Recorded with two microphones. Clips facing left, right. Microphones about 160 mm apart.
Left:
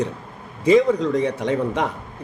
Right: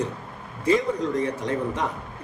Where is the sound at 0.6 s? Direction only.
80° left.